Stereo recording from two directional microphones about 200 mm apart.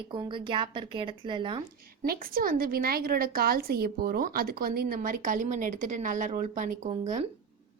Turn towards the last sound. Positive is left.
turn(degrees=-35)  # may be behind; listen again after turning